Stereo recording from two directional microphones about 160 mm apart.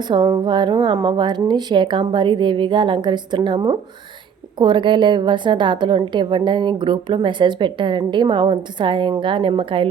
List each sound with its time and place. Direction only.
0.1 s a woman's voice: 25° right (ahead or behind)